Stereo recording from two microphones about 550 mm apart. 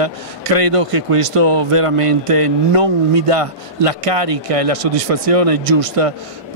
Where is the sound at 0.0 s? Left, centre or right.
Right.